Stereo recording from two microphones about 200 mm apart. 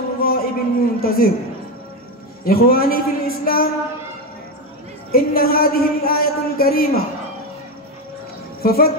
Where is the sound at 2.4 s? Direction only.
50° left (ahead or behind).